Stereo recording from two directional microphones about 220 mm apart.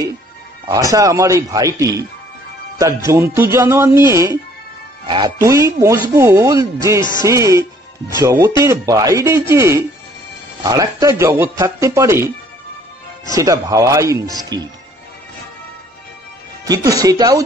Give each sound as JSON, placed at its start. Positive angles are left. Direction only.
{"t": 0.9, "sound": "speech", "side_deg": -15}
{"t": 13.4, "sound": "speech", "side_deg": -15}
{"t": 16.6, "sound": "speech", "side_deg": -15}